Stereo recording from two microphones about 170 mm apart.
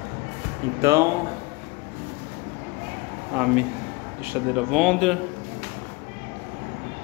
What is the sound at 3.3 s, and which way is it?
Speech, 5° right (ahead or behind).